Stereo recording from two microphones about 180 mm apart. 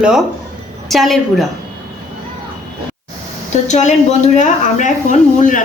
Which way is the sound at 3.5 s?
40° left (ahead or behind).